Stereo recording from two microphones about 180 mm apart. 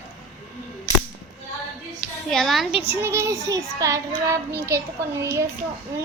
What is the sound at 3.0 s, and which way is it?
Child singing, 15° right (ahead or behind).